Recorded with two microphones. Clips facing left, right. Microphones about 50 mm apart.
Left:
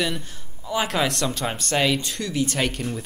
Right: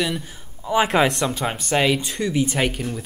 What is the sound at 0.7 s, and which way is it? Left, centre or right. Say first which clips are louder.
Speech: right 5 dB; right.